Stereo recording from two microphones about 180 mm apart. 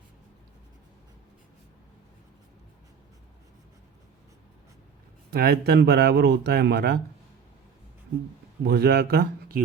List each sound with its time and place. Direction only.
5.3 s speech: 60° right (ahead or behind)
8.6 s speech: 65° right (ahead or behind)